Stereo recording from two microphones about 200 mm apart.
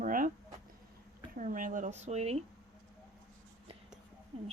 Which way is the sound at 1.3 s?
40° right (ahead or behind).